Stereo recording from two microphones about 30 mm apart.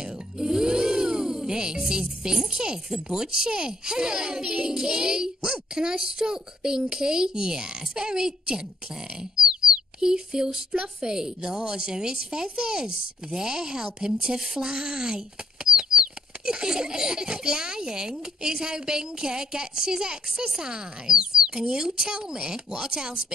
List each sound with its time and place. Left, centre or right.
0.0 s music: centre
1.9 s a child's voice: centre
9.4 s bird: right
10.8 s a child's voice: right